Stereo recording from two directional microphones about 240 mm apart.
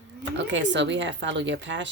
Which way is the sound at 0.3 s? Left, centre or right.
Right.